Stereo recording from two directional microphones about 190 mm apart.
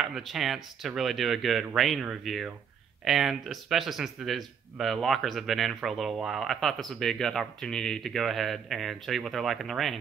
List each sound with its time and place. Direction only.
0.0 s speech: centre (ahead or behind)